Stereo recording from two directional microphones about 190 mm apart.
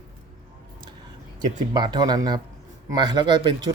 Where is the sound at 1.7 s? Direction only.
20° right (ahead or behind).